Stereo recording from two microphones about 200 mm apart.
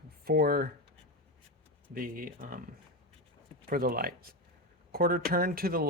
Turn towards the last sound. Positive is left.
turn(degrees=-50)  # may be behind; listen again after turning